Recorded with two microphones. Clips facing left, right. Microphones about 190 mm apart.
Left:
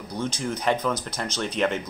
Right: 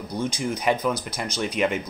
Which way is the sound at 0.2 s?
15° right (ahead or behind).